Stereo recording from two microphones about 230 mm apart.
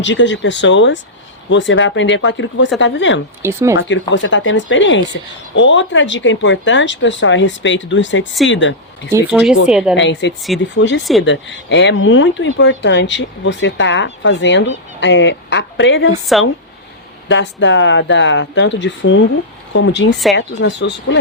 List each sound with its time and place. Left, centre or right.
0.0 s speech: left
3.4 s speech: centre
3.8 s speech: left
9.3 s a woman's voice: centre
9.9 s speech: left
16.2 s a woman's voice: centre
17.2 s speech: left